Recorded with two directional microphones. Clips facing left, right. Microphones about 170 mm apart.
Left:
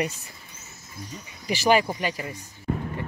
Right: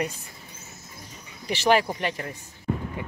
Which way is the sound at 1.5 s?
5° left (ahead or behind).